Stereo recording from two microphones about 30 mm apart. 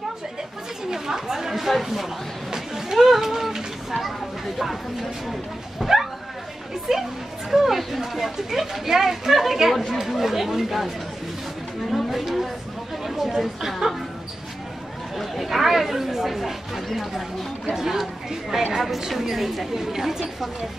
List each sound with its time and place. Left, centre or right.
0.9 s speech: centre
2.5 s a sound: centre
4.6 s speech: centre
6.9 s chatter: centre
7.5 s a woman's voice: centre
11.9 s chatter: centre
13.0 s a woman's voice: centre
15.1 s a woman's voice: centre